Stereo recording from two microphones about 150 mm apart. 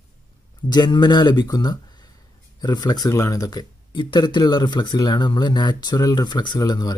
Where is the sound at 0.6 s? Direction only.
30° left (ahead or behind).